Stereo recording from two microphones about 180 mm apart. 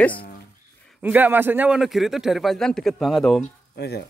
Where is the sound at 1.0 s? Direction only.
10° right (ahead or behind).